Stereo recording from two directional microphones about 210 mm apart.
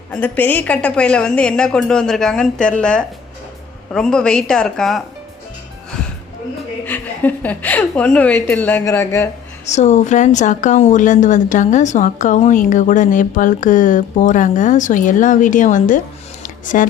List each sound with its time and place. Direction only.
0.1 s a woman's voice: 5° left (ahead or behind)
6.8 s a woman's voice: 10° left (ahead or behind)
9.6 s a woman's voice: 35° left (ahead or behind)
16.4 s a sound: 40° left (ahead or behind)